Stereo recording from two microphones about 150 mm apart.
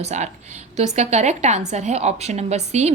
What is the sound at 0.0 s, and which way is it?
A woman's voice, 50° right (ahead or behind).